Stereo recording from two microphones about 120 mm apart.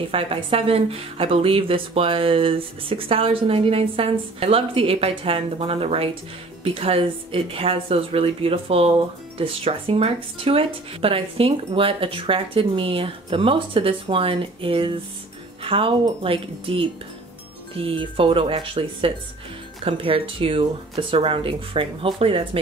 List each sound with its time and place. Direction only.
0.1 s speech: 50° right (ahead or behind)